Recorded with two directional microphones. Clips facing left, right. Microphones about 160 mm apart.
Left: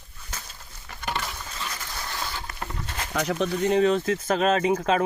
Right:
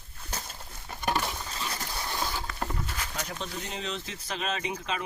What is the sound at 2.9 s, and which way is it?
Speech, 75° left (ahead or behind).